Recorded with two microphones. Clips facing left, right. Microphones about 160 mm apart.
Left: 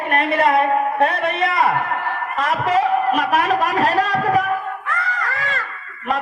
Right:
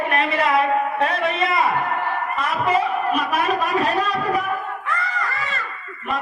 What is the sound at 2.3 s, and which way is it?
A man's voice, 90° left.